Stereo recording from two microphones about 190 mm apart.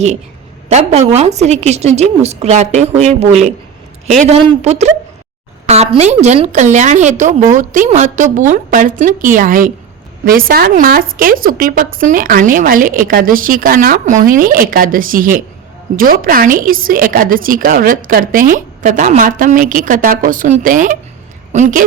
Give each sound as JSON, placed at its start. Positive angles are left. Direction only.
{"t": 0.7, "sound": "a woman's voice", "side_deg": -35}
{"t": 4.4, "sound": "a woman's voice", "side_deg": -35}